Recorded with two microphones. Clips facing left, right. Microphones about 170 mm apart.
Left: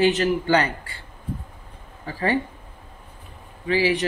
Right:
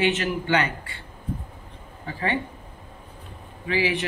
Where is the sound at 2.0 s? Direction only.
35° left (ahead or behind).